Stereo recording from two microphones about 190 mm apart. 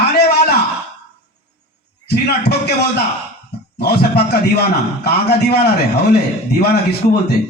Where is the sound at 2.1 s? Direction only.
60° left (ahead or behind).